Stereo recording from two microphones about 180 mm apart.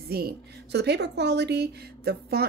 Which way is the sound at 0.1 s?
60° right (ahead or behind).